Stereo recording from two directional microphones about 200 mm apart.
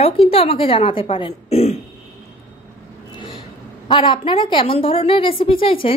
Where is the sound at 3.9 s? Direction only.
25° left (ahead or behind).